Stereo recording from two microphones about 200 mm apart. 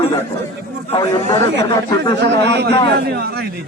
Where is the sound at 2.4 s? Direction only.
55° right (ahead or behind).